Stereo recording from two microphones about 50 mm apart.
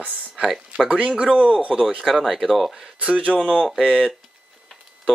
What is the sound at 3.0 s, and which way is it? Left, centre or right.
Speech, right.